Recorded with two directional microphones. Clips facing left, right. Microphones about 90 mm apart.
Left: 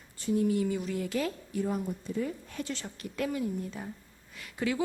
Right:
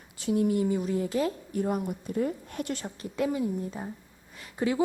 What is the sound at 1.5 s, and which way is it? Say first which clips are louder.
A woman's voice: right 2 dB; 50° right (ahead or behind).